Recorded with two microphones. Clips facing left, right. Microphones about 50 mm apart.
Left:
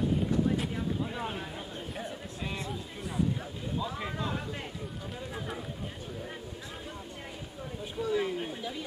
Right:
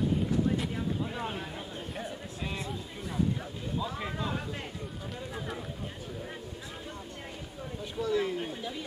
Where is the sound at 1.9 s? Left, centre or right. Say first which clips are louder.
Even; centre.